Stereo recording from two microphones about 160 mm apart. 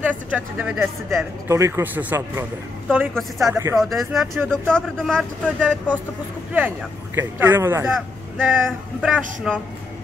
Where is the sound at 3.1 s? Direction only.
Centre (ahead or behind).